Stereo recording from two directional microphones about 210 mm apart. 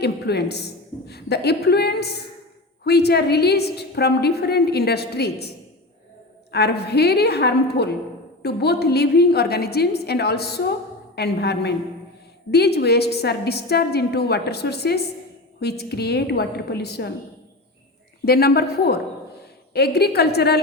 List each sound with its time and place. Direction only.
0.0 s a woman's voice: 50° left (ahead or behind)
6.5 s a woman's voice: 50° left (ahead or behind)
18.3 s a woman's voice: 45° left (ahead or behind)